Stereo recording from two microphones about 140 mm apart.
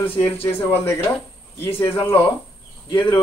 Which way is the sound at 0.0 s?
15° left (ahead or behind).